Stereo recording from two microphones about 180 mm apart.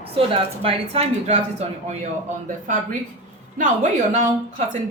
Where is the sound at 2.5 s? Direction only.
45° right (ahead or behind).